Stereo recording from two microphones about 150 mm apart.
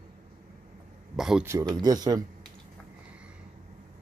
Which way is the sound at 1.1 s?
5° right (ahead or behind).